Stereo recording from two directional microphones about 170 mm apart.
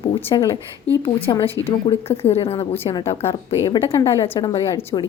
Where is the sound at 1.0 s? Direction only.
35° left (ahead or behind).